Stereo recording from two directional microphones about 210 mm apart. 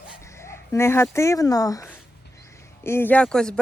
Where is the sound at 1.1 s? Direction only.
15° left (ahead or behind).